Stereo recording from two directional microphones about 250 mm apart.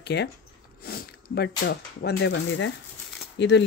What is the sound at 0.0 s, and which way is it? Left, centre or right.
Speech, left.